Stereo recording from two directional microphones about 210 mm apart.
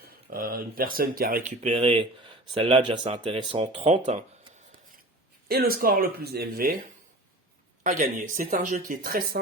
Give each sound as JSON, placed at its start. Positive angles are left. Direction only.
{"t": 0.0, "sound": "speech", "side_deg": -45}
{"t": 5.5, "sound": "speech", "side_deg": -45}
{"t": 7.9, "sound": "speech", "side_deg": -40}